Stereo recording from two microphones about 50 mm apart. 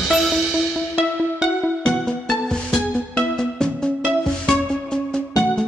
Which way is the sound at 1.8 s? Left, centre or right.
Centre.